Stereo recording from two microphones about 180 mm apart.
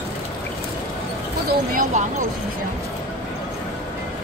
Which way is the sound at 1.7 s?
50° right (ahead or behind).